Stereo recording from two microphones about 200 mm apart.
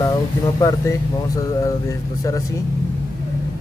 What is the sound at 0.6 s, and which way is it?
A man's voice, 15° left (ahead or behind).